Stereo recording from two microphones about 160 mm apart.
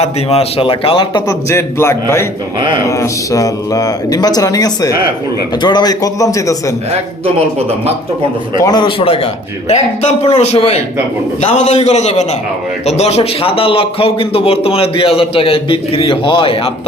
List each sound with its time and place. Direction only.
0.0 s a man's voice: 40° left (ahead or behind)
1.5 s a man's voice: 15° left (ahead or behind)
8.6 s a man's voice: 25° left (ahead or behind)